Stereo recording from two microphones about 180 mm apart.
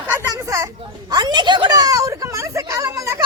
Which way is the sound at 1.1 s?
25° right (ahead or behind).